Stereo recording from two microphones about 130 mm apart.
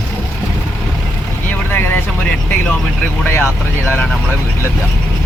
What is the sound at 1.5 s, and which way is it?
Vehicle, 15° left (ahead or behind).